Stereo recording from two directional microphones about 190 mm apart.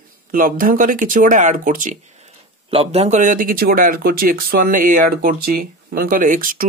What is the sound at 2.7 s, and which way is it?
Speech, 30° right (ahead or behind).